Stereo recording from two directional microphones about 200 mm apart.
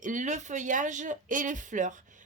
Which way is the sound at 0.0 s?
40° right (ahead or behind).